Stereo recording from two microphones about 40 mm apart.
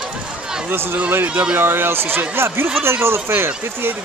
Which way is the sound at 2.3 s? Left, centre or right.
Right.